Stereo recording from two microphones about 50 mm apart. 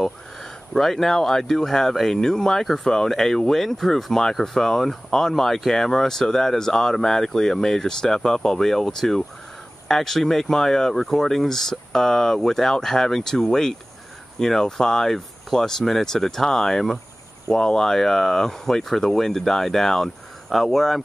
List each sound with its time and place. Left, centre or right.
0.0 s speech: centre